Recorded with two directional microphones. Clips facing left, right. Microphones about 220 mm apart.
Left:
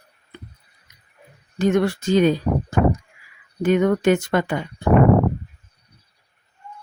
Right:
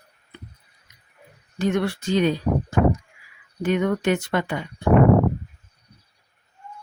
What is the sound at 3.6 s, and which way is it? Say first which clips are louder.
Speech: left 4 dB; 45° left (ahead or behind).